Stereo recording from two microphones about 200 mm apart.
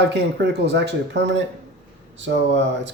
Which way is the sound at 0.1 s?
55° right (ahead or behind).